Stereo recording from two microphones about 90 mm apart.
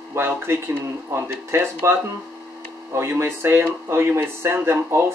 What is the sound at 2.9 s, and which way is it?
Speech, 30° right (ahead or behind).